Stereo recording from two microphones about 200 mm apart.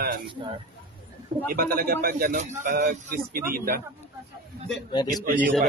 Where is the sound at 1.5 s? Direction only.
50° right (ahead or behind).